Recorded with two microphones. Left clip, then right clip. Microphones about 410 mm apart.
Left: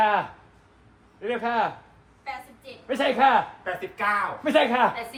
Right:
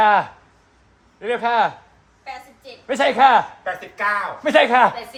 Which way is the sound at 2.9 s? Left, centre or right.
Right.